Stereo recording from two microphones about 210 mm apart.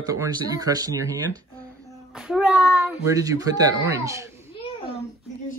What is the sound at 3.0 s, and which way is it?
Speech, 15° right (ahead or behind).